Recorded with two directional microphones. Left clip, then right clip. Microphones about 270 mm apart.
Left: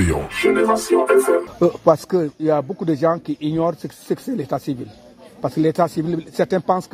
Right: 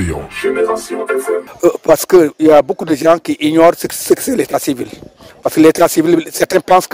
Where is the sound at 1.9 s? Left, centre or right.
Right.